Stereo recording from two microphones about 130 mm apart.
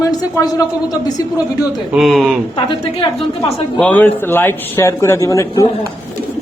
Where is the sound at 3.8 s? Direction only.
10° left (ahead or behind).